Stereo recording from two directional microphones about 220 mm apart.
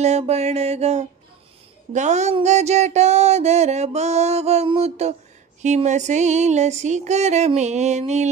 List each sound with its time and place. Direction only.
0.0 s music: 30° right (ahead or behind)